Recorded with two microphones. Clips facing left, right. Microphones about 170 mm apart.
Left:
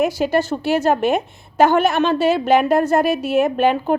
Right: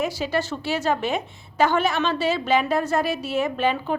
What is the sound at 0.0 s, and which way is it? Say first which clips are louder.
A woman's voice: left 7 dB; 55° left (ahead or behind).